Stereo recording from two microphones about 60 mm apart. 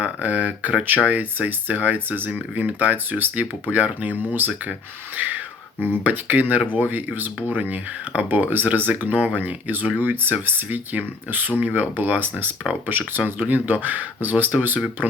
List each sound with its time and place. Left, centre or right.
0.0 s speech: right
5.8 s speech: right